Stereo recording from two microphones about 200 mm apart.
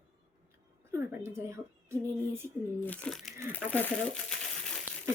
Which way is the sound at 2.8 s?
5° left (ahead or behind).